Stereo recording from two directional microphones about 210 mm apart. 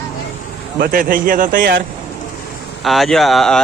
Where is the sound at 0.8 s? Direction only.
45° right (ahead or behind).